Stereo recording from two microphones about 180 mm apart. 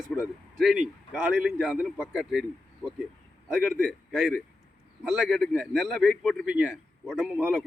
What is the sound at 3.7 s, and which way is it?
A man's voice, centre (ahead or behind).